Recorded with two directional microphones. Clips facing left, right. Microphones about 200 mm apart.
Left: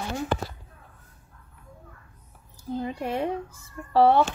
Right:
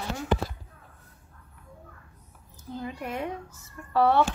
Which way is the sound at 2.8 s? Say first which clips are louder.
Left 4 dB; 30° left (ahead or behind).